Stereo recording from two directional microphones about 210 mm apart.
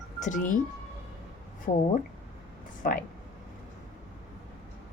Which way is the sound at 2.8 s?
40° left (ahead or behind).